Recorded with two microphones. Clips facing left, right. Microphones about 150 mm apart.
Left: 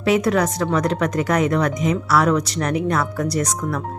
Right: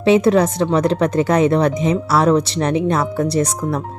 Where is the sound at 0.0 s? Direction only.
25° right (ahead or behind).